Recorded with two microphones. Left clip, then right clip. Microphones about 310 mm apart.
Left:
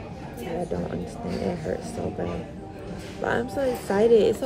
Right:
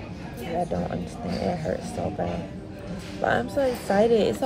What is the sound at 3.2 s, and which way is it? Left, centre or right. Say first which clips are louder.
Speech: right 2 dB; centre.